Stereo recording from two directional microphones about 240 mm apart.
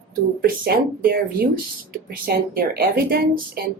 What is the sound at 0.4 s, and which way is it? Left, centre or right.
A woman's voice, right.